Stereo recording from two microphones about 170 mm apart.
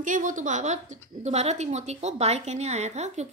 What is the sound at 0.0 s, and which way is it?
A woman's voice, 50° right (ahead or behind).